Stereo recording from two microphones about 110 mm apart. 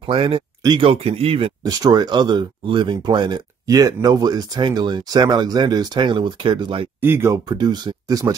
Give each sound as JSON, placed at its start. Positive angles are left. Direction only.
{"t": 0.0, "sound": "speech", "side_deg": -50}
{"t": 1.6, "sound": "speech", "side_deg": -35}
{"t": 3.6, "sound": "speech", "side_deg": -35}
{"t": 7.0, "sound": "speech", "side_deg": -20}
{"t": 7.4, "sound": "speech", "side_deg": -40}